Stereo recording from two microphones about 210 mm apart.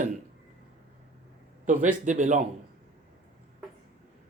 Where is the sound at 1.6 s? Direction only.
35° right (ahead or behind).